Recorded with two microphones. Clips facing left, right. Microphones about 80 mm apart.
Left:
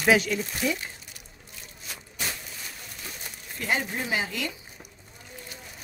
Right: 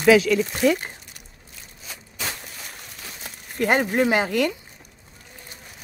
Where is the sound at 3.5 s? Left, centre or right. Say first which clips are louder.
Right 9 dB; right.